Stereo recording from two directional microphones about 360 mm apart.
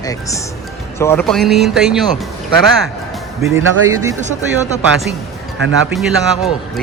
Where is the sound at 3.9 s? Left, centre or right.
Centre.